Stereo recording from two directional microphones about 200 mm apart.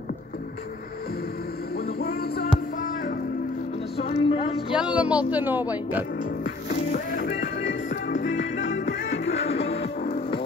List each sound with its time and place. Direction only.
1.8 s a sound: 50° left (ahead or behind)
3.9 s a sound: 30° left (ahead or behind)
4.7 s speech: 5° right (ahead or behind)
7.2 s music: 60° left (ahead or behind)
9.3 s music: 30° left (ahead or behind)
9.8 s music: 50° left (ahead or behind)